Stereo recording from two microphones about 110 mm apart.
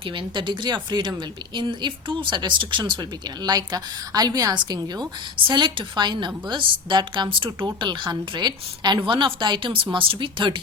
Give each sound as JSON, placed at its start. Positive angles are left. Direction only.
{"t": 0.2, "sound": "a woman's voice", "side_deg": -45}